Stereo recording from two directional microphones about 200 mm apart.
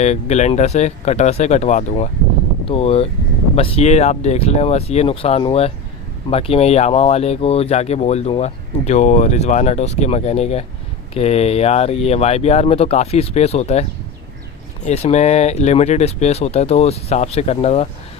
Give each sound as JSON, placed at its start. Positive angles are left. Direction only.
{"t": 0.0, "sound": "speech", "side_deg": 35}
{"t": 14.8, "sound": "speech", "side_deg": 35}